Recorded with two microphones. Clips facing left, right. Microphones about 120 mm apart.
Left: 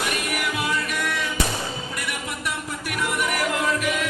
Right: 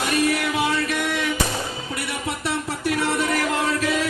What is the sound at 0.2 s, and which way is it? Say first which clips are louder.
Music: right 6 dB; 25° right (ahead or behind).